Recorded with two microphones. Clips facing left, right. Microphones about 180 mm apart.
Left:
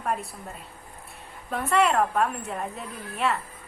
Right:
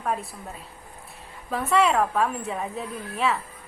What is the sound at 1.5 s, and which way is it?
A woman's voice, centre (ahead or behind).